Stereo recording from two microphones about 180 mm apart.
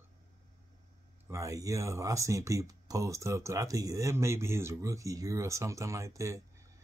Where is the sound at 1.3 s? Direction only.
15° right (ahead or behind).